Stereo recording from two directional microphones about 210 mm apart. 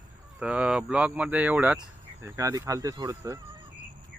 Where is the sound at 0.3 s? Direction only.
5° right (ahead or behind).